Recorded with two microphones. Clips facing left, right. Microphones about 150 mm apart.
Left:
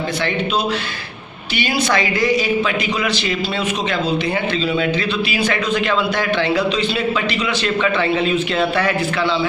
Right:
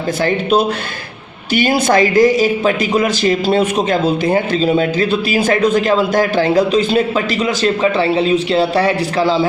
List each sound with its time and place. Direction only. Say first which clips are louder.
1.5 s a man's voice: right 6 dB; 45° right (ahead or behind)